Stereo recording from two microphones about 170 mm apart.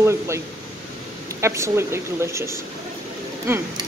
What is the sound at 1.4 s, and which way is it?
Speech, 15° right (ahead or behind).